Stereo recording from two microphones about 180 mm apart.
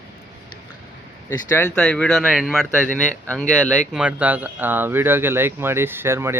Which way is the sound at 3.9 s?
5° right (ahead or behind).